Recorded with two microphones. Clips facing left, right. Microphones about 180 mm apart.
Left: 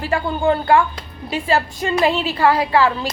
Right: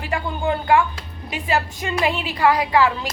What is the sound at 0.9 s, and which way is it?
Speech, 15° right (ahead or behind).